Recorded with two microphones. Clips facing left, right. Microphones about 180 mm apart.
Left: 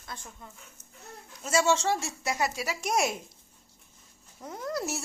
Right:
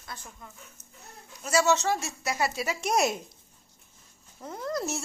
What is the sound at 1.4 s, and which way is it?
Speech, 25° left (ahead or behind).